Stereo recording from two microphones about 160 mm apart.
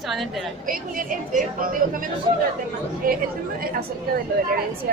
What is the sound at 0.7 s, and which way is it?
A woman's voice, 60° right (ahead or behind).